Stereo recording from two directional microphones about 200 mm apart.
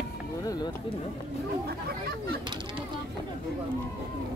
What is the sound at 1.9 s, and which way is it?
Speech, 50° right (ahead or behind).